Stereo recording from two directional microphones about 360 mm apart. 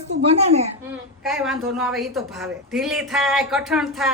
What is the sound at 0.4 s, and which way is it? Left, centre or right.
Speech, centre.